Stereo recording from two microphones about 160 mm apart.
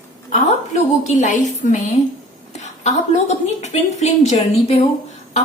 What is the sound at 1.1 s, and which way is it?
A woman's voice, 50° left (ahead or behind).